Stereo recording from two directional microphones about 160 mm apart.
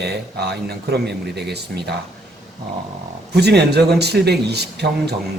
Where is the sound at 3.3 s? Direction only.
90° right.